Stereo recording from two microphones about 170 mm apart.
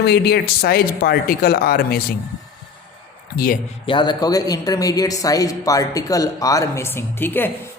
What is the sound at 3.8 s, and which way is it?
Speech, 25° left (ahead or behind).